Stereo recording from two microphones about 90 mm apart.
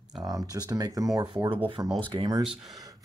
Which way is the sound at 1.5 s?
70° right (ahead or behind).